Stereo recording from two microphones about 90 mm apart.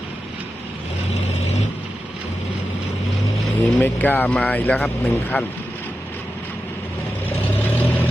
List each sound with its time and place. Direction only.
3.6 s speech: 20° left (ahead or behind)
7.3 s vehicle: 20° left (ahead or behind)